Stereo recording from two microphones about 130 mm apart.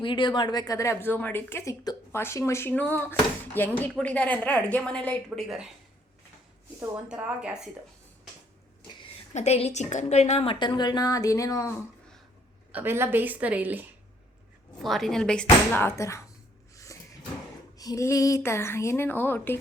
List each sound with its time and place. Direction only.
0.0 s speech: 40° left (ahead or behind); by 5.6 s centre (ahead or behind)
7.1 s a woman's voice: 10° right (ahead or behind)
9.3 s a woman's voice: 60° left (ahead or behind)
10.5 s speech: 35° left (ahead or behind)
12.7 s a woman's voice: 15° right (ahead or behind)
14.8 s a woman's voice: centre (ahead or behind)
15.4 s speech: 20° left (ahead or behind)
16.7 s a sound: 25° left (ahead or behind)
17.7 s speech: 25° left (ahead or behind)